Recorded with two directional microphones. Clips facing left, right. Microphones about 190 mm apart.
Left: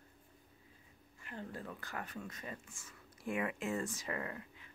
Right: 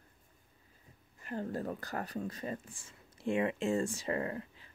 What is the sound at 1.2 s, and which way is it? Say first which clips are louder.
Speech: right 9 dB; 40° right (ahead or behind).